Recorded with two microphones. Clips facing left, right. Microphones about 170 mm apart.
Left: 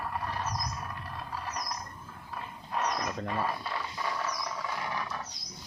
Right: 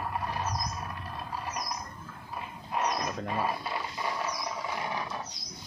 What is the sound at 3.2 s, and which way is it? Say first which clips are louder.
Mechanisms: right 1 dB; 15° right (ahead or behind).